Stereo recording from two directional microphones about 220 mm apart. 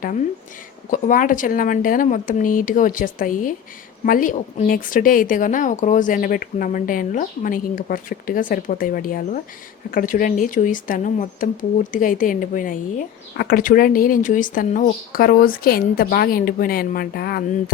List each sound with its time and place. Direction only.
0.9 s a woman's voice: 35° left (ahead or behind)